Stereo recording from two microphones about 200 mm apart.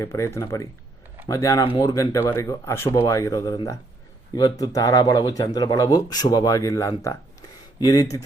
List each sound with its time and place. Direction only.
0.0 s speech: 15° left (ahead or behind)